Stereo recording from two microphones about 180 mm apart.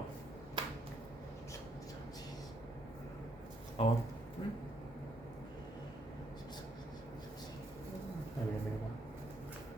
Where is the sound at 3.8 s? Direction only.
30° left (ahead or behind).